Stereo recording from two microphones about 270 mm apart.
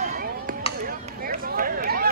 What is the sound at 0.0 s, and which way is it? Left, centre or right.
Chop, right.